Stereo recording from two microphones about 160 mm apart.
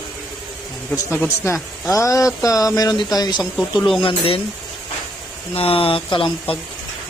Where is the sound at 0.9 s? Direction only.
15° left (ahead or behind); by 4.3 s 35° left (ahead or behind).